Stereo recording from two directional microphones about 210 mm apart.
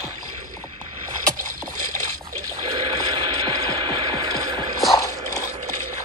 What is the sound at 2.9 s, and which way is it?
Music, 15° right (ahead or behind).